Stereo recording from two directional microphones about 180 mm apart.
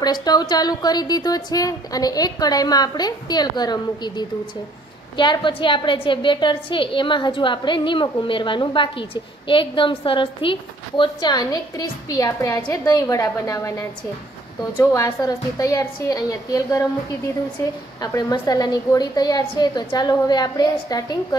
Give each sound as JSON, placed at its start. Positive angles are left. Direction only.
{"t": 0.0, "sound": "a woman's voice", "side_deg": 20}